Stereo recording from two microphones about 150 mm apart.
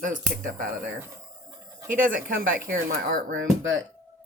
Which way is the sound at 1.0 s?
20° right (ahead or behind).